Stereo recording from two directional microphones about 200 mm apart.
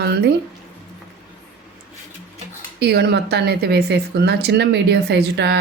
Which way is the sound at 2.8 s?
55° right (ahead or behind).